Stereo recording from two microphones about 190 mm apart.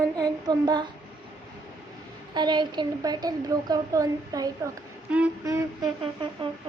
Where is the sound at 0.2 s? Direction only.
20° right (ahead or behind).